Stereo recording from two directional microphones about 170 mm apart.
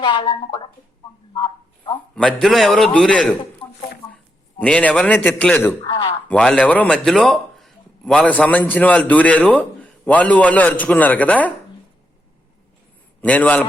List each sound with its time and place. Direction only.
0.0 s speech: 30° left (ahead or behind)
1.3 s a sound: 25° left (ahead or behind)
2.1 s a man's voice: 5° left (ahead or behind)
3.6 s a sound: 30° left (ahead or behind)
4.1 s a man's voice: 5° left (ahead or behind)
13.2 s speech: 10° left (ahead or behind)